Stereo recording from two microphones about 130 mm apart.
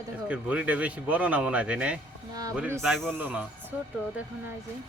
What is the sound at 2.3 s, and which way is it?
Speech, 30° right (ahead or behind).